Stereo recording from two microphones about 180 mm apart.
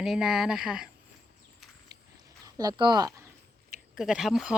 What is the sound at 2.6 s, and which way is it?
Speech, 25° right (ahead or behind).